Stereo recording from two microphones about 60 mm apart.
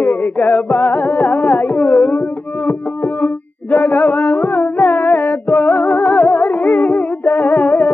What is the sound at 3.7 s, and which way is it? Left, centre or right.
Music, left.